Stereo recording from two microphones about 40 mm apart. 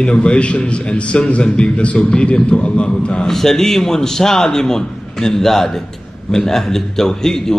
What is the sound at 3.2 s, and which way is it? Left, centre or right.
A man's voice, centre.